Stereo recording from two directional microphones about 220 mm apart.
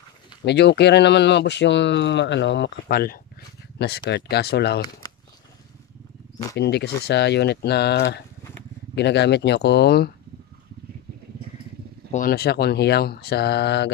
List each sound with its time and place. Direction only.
0.4 s speech: 50° left (ahead or behind)
5.0 s a sound: 15° left (ahead or behind)
6.5 s speech: 50° left (ahead or behind)
12.1 s speech: 40° left (ahead or behind)